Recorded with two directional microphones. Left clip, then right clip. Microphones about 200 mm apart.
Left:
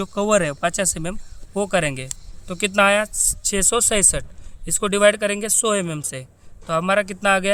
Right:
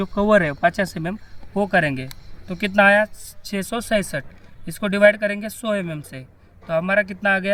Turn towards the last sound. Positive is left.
turn(degrees=60)  # may be behind; listen again after turning